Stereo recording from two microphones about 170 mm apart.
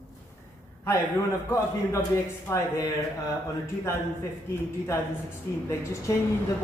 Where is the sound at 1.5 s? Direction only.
15° left (ahead or behind).